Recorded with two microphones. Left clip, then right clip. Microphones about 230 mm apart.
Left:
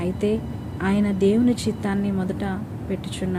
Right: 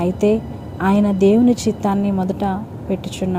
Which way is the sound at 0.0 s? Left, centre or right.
Right.